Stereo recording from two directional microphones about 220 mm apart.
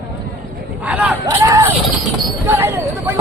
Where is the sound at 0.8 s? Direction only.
5° right (ahead or behind).